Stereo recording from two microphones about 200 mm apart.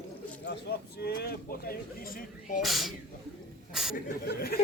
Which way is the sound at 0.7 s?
55° left (ahead or behind).